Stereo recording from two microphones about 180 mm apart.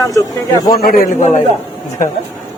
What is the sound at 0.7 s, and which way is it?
Speech, 55° left (ahead or behind).